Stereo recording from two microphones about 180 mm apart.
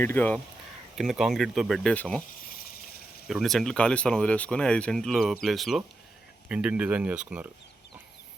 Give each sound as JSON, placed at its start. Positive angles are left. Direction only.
{"t": 0.0, "sound": "speech", "side_deg": 10}
{"t": 0.9, "sound": "speech", "side_deg": -5}
{"t": 3.2, "sound": "speech", "side_deg": 0}